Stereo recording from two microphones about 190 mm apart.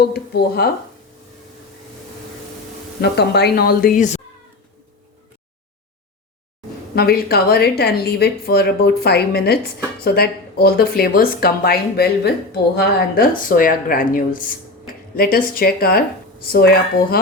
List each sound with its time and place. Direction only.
0.0 s speech: 55° left (ahead or behind)
3.0 s speech: 60° left (ahead or behind); by 4.2 s 40° left (ahead or behind)
6.9 s speech: 55° left (ahead or behind)